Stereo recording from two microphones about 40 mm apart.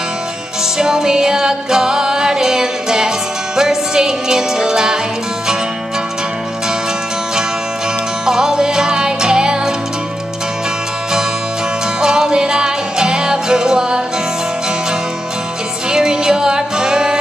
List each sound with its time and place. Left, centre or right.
0.7 s music: centre
8.3 s music: centre
12.0 s music: centre
15.9 s music: centre